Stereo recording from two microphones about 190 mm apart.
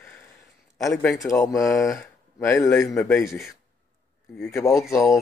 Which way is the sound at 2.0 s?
15° left (ahead or behind).